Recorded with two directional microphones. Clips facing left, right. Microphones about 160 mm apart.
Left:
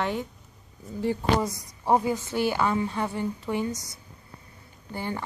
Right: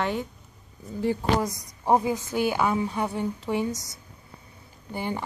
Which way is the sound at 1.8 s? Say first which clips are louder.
Right 1 dB; 10° right (ahead or behind).